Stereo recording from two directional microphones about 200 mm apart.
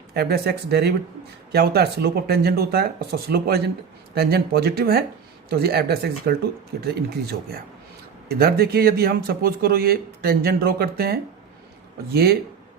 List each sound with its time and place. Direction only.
0.1 s speech: 50° right (ahead or behind)